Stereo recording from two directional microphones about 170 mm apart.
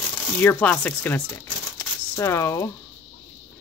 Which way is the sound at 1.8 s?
15° left (ahead or behind).